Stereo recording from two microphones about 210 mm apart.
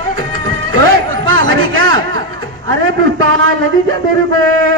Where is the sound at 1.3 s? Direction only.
55° right (ahead or behind).